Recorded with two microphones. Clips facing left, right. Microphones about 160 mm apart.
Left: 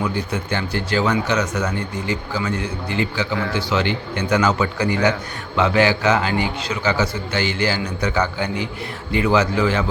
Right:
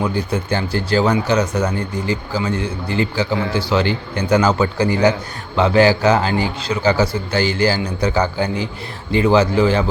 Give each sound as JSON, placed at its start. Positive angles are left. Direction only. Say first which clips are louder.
{"t": 0.0, "sound": "speech", "louder": "right 3 dB", "side_deg": -30}